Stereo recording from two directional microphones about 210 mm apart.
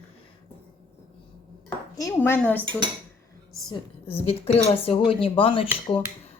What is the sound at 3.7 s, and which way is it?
A woman's voice, 30° left (ahead or behind).